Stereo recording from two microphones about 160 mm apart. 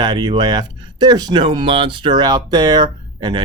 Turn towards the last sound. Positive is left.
turn(degrees=-30)  # may be behind; listen again after turning